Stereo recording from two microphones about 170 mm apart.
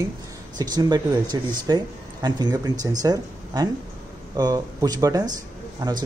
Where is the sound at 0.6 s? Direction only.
25° right (ahead or behind).